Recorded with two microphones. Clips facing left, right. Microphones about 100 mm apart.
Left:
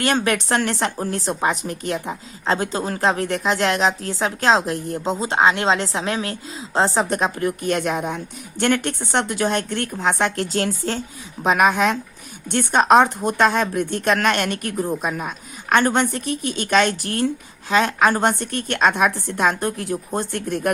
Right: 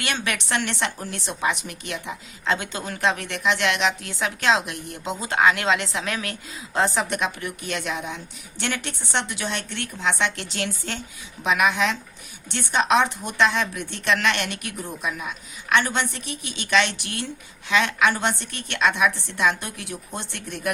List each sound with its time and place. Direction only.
0.0 s a woman's voice: 40° left (ahead or behind)